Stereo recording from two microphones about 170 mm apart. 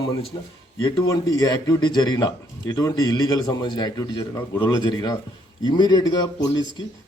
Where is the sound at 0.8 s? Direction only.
25° left (ahead or behind).